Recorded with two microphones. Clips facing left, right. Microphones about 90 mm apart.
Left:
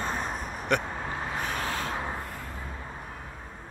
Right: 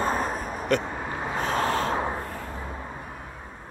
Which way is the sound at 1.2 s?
25° right (ahead or behind).